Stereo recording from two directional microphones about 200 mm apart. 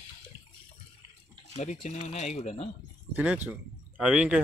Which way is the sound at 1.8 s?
35° left (ahead or behind).